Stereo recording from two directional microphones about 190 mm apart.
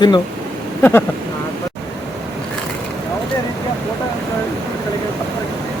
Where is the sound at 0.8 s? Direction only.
10° left (ahead or behind).